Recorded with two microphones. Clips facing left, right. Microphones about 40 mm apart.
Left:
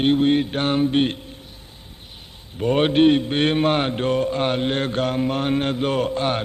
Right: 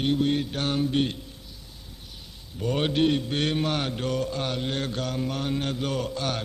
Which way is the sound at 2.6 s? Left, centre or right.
Left.